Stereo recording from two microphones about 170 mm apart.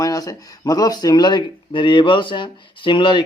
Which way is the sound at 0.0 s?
20° left (ahead or behind).